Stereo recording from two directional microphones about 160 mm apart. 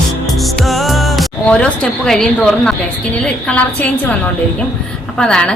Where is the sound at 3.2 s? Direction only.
5° left (ahead or behind).